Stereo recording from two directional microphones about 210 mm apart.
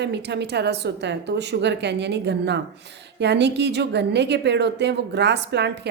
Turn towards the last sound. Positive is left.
turn(degrees=-55)  # may be behind; listen again after turning